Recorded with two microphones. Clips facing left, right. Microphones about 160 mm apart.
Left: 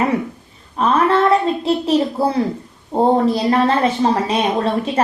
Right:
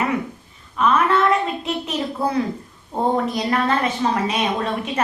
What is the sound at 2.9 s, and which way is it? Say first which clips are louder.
A woman's voice: left 6 dB; 30° left (ahead or behind).